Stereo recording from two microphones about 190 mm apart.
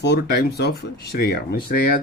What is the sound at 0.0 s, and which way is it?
Speech, 60° left (ahead or behind).